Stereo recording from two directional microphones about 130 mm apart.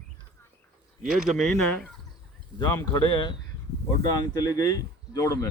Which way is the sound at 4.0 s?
30° left (ahead or behind).